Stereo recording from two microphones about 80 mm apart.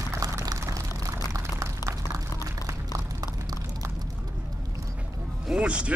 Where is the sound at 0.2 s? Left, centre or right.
Right.